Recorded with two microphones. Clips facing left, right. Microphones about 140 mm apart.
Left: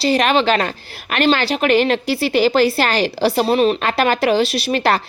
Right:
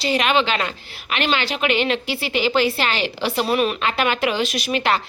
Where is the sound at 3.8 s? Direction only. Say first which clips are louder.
Left 4 dB; 45° left (ahead or behind).